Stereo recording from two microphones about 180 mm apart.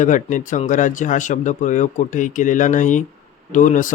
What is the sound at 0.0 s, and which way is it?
A man's voice, 45° left (ahead or behind).